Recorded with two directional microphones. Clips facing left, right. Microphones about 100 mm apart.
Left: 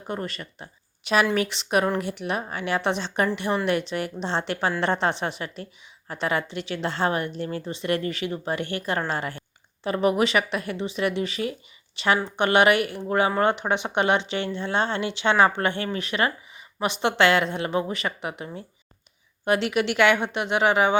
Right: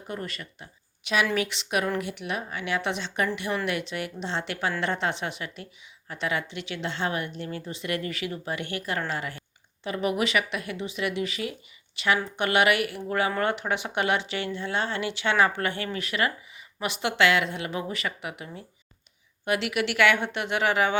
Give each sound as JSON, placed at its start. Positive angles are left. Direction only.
{"t": 0.1, "sound": "speech", "side_deg": 35}